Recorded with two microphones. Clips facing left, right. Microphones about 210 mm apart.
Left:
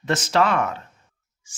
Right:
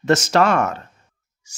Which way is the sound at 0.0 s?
45° right (ahead or behind).